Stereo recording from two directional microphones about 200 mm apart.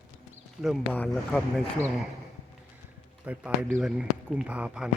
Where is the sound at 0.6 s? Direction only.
5° left (ahead or behind).